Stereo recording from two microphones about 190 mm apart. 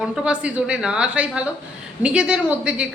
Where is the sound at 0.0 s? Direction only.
5° right (ahead or behind).